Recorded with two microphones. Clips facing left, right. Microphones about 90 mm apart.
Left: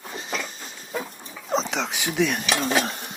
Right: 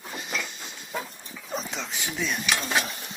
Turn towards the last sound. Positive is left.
turn(degrees=55)  # may be behind; listen again after turning